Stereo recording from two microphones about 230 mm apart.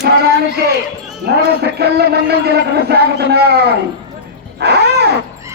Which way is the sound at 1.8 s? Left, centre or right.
Right.